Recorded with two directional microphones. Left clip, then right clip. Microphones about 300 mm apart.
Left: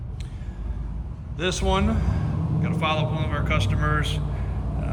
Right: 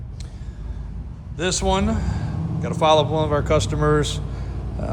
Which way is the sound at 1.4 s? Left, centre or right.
Centre.